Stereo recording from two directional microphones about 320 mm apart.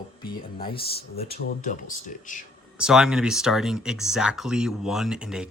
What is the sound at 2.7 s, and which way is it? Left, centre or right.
Speech, centre.